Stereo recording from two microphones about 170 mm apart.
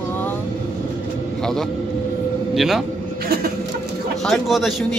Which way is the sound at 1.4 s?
Centre (ahead or behind).